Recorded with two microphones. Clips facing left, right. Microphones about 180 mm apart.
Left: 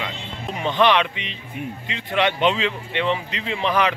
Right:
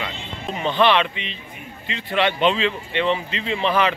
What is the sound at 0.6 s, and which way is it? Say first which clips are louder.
Speech: even; 15° left (ahead or behind).